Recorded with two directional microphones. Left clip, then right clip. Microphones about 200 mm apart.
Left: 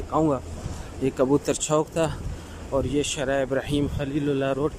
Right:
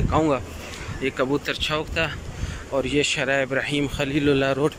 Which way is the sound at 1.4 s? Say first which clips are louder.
Left 1 dB; 30° left (ahead or behind).